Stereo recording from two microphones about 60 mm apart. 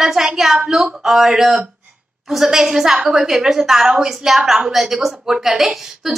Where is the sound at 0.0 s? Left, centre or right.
Centre.